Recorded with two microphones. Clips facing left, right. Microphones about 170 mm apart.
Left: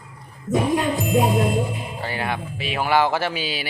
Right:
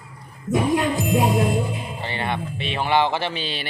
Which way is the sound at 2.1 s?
5° left (ahead or behind).